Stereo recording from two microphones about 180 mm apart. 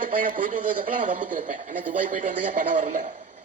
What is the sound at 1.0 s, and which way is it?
A man's voice, 45° right (ahead or behind).